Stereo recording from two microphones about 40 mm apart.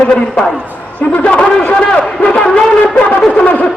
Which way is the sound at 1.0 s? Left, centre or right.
Left.